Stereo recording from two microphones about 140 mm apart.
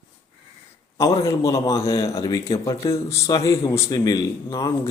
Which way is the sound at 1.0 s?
25° left (ahead or behind).